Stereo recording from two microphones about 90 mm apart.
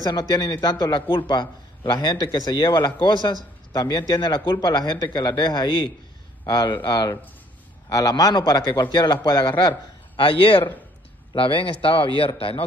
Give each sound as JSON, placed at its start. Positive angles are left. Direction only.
{"t": 0.0, "sound": "a man's voice", "side_deg": 50}
{"t": 7.9, "sound": "a man's voice", "side_deg": 45}
{"t": 10.2, "sound": "a man's voice", "side_deg": 80}